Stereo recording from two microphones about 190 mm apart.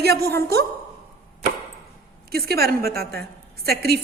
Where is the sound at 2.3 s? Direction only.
55° right (ahead or behind).